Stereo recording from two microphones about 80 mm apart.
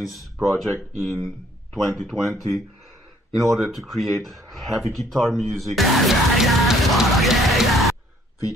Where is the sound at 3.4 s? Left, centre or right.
Centre.